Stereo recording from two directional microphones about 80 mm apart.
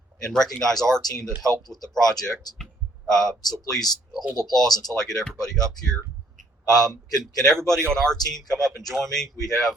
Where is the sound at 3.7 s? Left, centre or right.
Centre.